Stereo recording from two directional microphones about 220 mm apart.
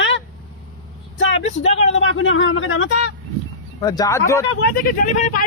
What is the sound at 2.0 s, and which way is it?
Speech, 60° left (ahead or behind).